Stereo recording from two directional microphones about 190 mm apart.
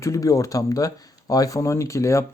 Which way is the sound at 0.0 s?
15° left (ahead or behind).